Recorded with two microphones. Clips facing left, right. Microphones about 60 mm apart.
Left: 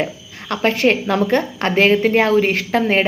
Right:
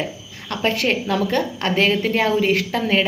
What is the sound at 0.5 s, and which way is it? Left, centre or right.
A woman's voice, left.